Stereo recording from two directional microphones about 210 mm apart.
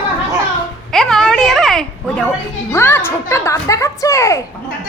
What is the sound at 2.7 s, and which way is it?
A woman's voice, 10° left (ahead or behind).